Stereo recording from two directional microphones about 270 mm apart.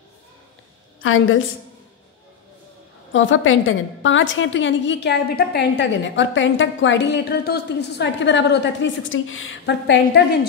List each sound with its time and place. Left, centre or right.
1.0 s a woman's voice: left
3.1 s a woman's voice: left